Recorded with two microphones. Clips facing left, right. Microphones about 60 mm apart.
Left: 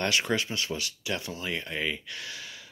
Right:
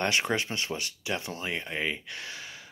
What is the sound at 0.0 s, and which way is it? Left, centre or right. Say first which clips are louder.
Speech: even; right.